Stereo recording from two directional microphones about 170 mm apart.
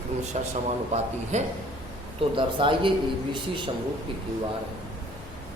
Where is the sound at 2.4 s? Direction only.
30° right (ahead or behind).